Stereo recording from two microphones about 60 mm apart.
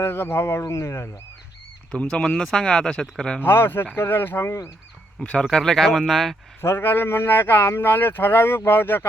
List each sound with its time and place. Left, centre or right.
0.0 s speech: left
1.9 s speech: centre
3.4 s speech: left
5.2 s speech: centre
6.6 s speech: left